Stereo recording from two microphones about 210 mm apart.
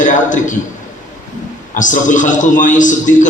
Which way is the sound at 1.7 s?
35° left (ahead or behind).